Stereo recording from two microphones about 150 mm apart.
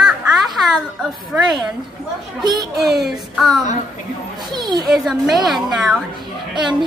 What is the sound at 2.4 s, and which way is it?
Speech, 25° right (ahead or behind).